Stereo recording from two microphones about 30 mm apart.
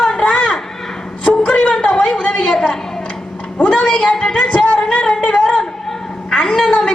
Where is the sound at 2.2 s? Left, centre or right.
Left.